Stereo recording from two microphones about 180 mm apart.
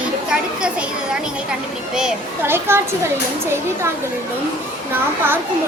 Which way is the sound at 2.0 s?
10° right (ahead or behind).